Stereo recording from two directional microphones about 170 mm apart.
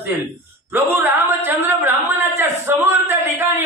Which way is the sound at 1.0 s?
15° right (ahead or behind).